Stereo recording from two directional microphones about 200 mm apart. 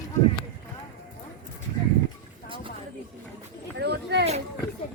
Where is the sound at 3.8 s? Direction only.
55° right (ahead or behind).